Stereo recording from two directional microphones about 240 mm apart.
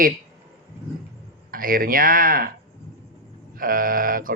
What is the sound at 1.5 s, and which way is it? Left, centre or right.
Speech, right.